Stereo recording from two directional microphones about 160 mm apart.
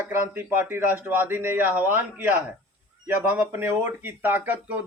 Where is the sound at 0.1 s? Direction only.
15° right (ahead or behind).